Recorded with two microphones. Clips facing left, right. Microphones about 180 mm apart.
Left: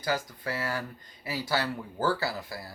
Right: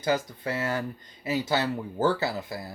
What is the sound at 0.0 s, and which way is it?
Speech, 20° right (ahead or behind).